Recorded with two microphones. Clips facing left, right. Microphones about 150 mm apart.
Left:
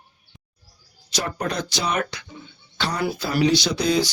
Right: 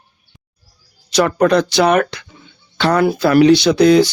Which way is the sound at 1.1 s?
75° right (ahead or behind).